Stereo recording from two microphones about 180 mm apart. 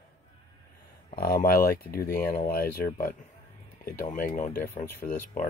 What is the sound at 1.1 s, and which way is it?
Speech, 55° left (ahead or behind).